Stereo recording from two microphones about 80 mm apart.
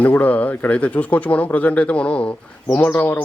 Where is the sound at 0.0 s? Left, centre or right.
Centre.